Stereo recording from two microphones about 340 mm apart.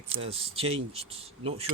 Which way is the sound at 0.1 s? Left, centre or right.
Centre.